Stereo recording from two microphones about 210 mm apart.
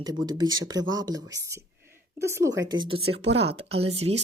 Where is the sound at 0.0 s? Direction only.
20° right (ahead or behind).